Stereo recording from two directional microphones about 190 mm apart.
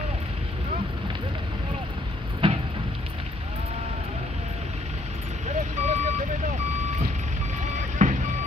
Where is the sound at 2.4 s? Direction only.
30° right (ahead or behind).